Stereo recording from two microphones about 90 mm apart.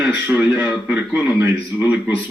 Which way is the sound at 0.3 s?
20° right (ahead or behind).